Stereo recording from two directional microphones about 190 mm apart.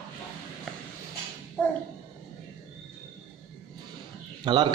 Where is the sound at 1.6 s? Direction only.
5° left (ahead or behind).